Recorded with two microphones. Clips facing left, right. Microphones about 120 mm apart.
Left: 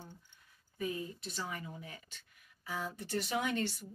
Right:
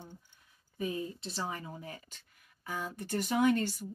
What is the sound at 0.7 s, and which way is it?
Speech, 25° right (ahead or behind).